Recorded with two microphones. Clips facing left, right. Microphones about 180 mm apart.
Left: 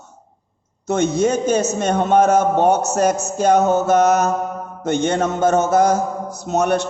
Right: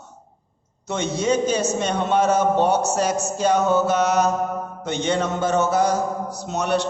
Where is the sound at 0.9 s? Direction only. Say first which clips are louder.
Left 5 dB; 50° left (ahead or behind).